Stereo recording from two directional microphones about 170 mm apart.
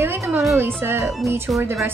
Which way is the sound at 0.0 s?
15° right (ahead or behind).